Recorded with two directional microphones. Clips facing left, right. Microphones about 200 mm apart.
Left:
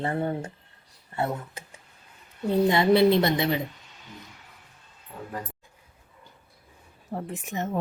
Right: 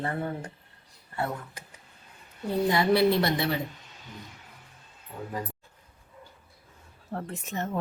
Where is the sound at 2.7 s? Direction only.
20° left (ahead or behind).